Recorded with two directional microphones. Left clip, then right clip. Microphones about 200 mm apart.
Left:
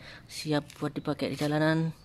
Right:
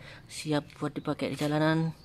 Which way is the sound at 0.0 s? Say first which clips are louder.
Left 1 dB; 5° left (ahead or behind).